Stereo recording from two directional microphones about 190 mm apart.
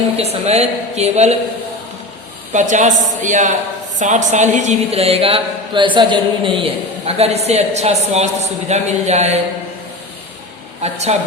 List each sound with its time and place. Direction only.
0.2 s a man's voice: 35° right (ahead or behind)
2.5 s a man's voice: 40° right (ahead or behind)
10.8 s a man's voice: 35° right (ahead or behind)